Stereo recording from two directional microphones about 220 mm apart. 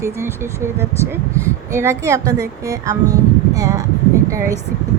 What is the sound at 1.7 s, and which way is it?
Speech, 10° right (ahead or behind).